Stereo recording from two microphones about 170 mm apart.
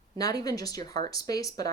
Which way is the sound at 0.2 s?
20° left (ahead or behind).